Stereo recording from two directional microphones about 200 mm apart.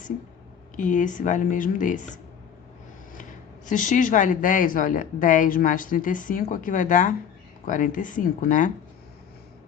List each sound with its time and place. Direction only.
0.8 s a woman's voice: 40° left (ahead or behind)
3.7 s a woman's voice: 40° left (ahead or behind)